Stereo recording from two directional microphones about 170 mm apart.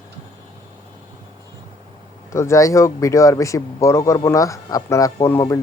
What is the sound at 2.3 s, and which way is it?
Speech, 15° left (ahead or behind).